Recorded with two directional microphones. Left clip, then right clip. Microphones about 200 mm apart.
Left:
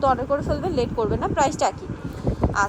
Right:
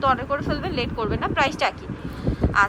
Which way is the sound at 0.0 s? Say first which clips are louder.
Left 1 dB; 20° left (ahead or behind).